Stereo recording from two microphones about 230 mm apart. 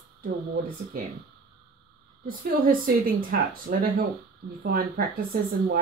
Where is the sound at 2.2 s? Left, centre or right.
Right.